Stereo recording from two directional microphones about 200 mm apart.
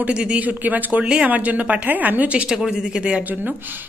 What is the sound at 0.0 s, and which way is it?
Speech, 5° right (ahead or behind).